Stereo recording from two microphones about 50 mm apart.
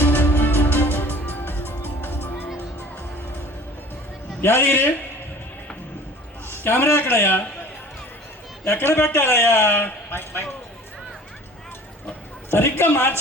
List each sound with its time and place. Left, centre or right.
0.0 s music: left
4.4 s a man's voice: left
6.5 s a sound: left
6.9 s a man's voice: left
8.8 s a man's voice: left
12.5 s a man's voice: left